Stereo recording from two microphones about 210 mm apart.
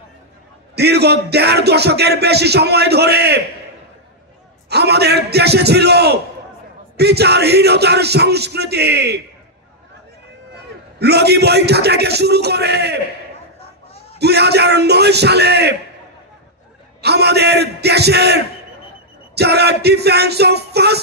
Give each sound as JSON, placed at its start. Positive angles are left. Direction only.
{"t": 0.7, "sound": "music", "side_deg": -50}
{"t": 4.6, "sound": "music", "side_deg": -50}
{"t": 11.0, "sound": "music", "side_deg": -50}
{"t": 14.1, "sound": "music", "side_deg": -50}
{"t": 17.0, "sound": "music", "side_deg": -50}